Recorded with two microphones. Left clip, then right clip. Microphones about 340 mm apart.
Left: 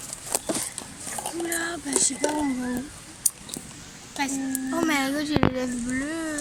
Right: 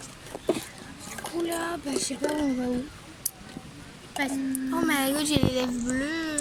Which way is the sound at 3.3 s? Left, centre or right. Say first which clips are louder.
Left 9 dB; centre.